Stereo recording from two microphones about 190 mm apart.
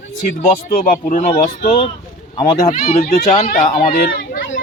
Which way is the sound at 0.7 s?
45° left (ahead or behind).